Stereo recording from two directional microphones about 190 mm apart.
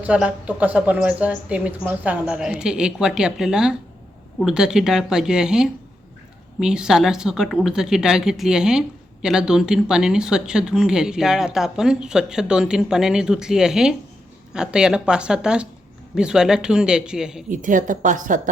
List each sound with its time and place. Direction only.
0.0 s speech: 5° right (ahead or behind)
17.5 s a woman's voice: 45° right (ahead or behind)